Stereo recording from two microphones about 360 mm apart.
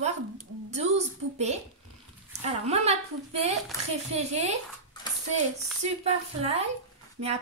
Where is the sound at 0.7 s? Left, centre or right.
Centre.